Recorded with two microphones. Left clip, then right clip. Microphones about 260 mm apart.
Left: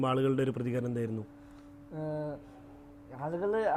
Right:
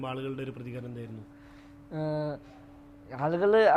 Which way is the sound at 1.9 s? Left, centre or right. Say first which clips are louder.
Right 4 dB; right.